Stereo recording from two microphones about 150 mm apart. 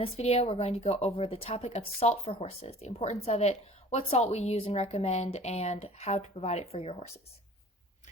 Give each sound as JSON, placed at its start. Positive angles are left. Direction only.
{"t": 0.0, "sound": "a woman's voice", "side_deg": 45}